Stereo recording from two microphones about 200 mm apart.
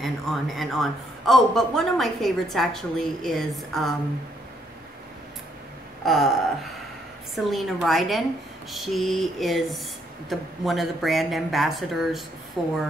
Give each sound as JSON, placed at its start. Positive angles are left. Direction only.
{"t": 0.0, "sound": "a man's voice", "side_deg": 0}
{"t": 6.0, "sound": "a man's voice", "side_deg": 0}